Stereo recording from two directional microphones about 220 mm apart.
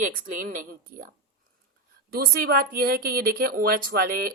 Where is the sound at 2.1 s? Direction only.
45° right (ahead or behind).